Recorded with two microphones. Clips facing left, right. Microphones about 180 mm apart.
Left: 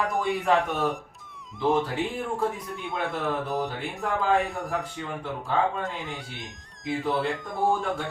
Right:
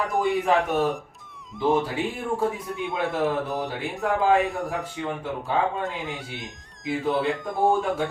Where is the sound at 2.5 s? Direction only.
Centre (ahead or behind).